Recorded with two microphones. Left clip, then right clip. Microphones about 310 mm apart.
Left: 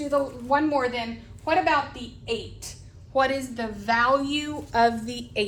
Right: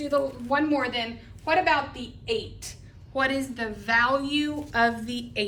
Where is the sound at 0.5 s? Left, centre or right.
Centre.